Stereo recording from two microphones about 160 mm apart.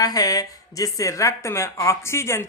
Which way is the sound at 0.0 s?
25° left (ahead or behind).